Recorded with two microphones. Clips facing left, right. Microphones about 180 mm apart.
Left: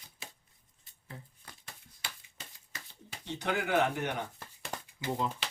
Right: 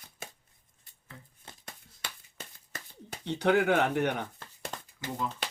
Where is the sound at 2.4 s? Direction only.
50° right (ahead or behind).